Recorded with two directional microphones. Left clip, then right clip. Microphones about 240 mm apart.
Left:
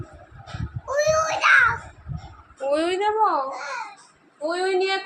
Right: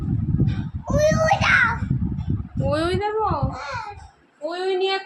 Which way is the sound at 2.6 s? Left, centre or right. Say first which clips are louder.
Left 1 dB; centre.